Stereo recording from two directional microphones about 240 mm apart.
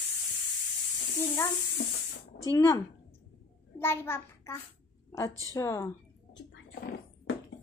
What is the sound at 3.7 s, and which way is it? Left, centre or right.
Child singing, centre.